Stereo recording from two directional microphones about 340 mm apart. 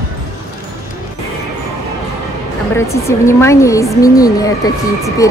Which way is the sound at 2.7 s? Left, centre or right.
Centre.